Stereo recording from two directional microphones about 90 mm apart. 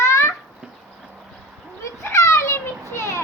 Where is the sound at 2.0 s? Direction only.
35° left (ahead or behind).